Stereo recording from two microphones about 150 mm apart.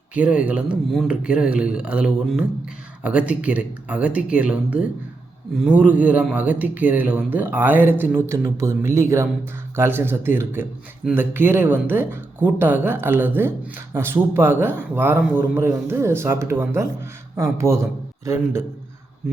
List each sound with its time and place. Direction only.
0.1 s speech: 10° right (ahead or behind)